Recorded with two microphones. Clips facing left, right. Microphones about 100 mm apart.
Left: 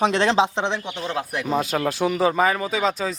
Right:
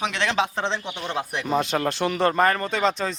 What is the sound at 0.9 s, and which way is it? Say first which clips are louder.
A man's voice: left 2 dB; centre (ahead or behind).